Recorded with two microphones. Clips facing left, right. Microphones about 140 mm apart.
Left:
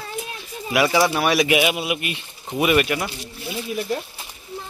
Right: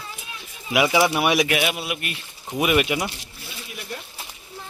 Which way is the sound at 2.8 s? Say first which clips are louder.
Even; 15° right (ahead or behind).